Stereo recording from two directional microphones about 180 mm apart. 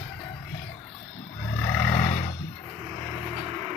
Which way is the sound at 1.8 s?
15° left (ahead or behind).